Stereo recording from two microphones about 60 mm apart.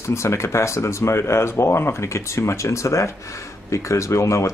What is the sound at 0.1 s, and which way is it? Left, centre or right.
Speech, left.